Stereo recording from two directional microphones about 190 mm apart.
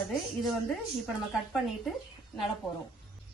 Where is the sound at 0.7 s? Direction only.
Centre (ahead or behind).